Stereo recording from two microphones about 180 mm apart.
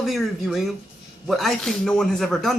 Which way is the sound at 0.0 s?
Centre (ahead or behind).